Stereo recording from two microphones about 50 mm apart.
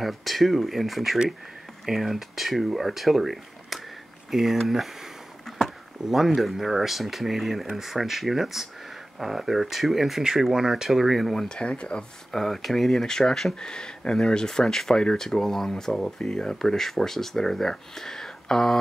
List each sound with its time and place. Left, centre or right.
0.0 s speech: centre
5.5 s a sound: centre
6.0 s speech: centre
11.4 s speech: left
12.3 s speech: centre